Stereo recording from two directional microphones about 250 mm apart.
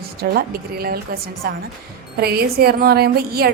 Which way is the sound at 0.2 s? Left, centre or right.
Right.